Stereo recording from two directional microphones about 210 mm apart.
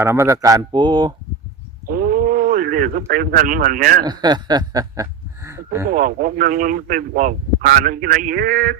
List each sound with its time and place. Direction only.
0.0 s speech: 10° right (ahead or behind)
1.9 s wild animals: 40° right (ahead or behind)
3.1 s speech: 40° right (ahead or behind)
4.0 s snicker: 20° right (ahead or behind)
5.9 s speech: 40° right (ahead or behind)